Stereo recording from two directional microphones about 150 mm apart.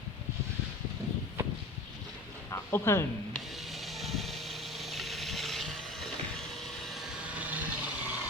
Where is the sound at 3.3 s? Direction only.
Centre (ahead or behind).